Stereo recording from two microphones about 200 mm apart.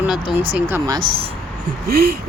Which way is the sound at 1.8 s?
50° right (ahead or behind).